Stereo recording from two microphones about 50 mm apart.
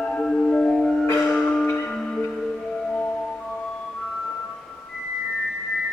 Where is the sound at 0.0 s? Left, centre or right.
Centre.